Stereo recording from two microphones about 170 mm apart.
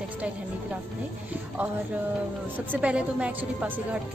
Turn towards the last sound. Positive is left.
turn(degrees=-5)  # may be behind; listen again after turning